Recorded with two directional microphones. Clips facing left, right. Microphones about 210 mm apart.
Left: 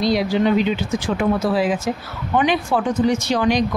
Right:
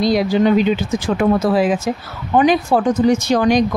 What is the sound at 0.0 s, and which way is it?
Speech, 45° right (ahead or behind).